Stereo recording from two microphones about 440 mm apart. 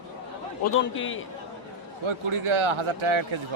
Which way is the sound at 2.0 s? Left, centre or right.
Right.